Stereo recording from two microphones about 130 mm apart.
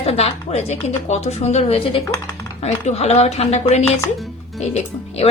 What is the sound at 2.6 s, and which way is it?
Speech, 60° left (ahead or behind).